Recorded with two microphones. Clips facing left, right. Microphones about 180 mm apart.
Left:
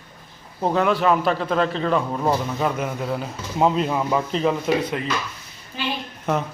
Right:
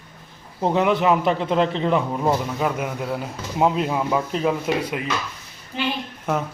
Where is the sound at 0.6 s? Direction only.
20° right (ahead or behind).